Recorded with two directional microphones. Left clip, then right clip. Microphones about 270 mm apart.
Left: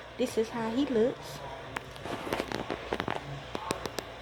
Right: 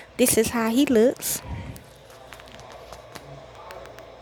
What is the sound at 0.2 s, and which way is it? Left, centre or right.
Speech, right.